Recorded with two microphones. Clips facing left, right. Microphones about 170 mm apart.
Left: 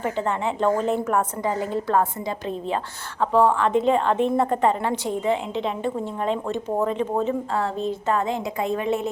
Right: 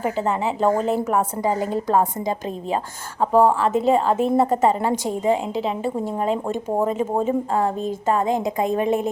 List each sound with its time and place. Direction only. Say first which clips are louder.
0.0 s a woman's voice: right 2 dB; 5° right (ahead or behind)
3.4 s a woman's voice: right 1 dB; 5° right (ahead or behind)
5.0 s a woman's voice: right 2 dB; 40° right (ahead or behind)
5.5 s a woman's voice: right 2 dB; 5° right (ahead or behind)
8.3 s a woman's voice: right 4 dB; 45° right (ahead or behind)